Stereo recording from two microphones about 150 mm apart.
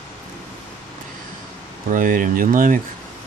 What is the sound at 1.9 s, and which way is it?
Speech, 65° right (ahead or behind).